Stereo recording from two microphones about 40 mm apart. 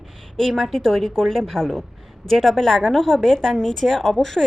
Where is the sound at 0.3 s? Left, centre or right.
Centre.